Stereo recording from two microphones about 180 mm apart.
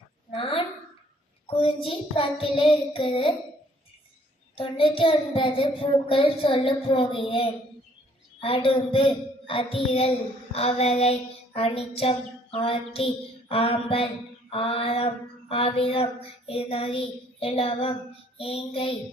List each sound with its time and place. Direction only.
0.3 s a sound: 30° left (ahead or behind)
1.5 s child singing: 30° left (ahead or behind)
4.5 s a woman's voice: 30° left (ahead or behind)
8.4 s child singing: 30° left (ahead or behind)